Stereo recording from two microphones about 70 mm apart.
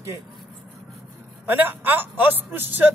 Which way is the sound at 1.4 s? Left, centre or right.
Right.